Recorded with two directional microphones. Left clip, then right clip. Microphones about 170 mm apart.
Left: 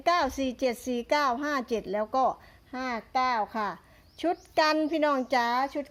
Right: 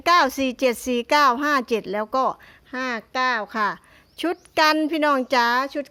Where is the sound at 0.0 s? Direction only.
45° right (ahead or behind).